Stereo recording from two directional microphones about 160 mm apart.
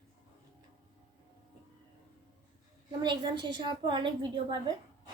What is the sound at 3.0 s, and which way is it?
A woman's voice, 30° right (ahead or behind).